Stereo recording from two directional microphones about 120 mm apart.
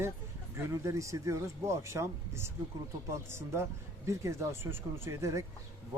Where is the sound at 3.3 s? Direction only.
20° right (ahead or behind).